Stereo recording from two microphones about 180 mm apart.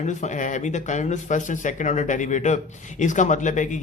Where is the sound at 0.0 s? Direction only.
40° left (ahead or behind).